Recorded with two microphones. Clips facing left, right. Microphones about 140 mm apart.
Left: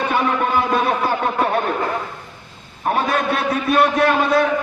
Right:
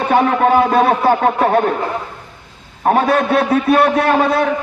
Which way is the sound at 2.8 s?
60° right (ahead or behind).